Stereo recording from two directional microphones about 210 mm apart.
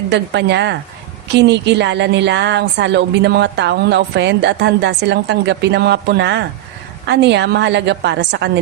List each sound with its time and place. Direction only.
0.1 s a woman's voice: 55° right (ahead or behind)